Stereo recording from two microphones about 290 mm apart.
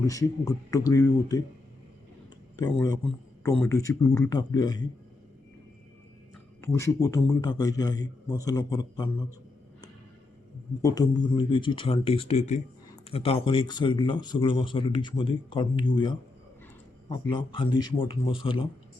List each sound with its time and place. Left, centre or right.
0.0 s speech: centre
2.7 s speech: centre
6.6 s speech: centre
10.8 s speech: centre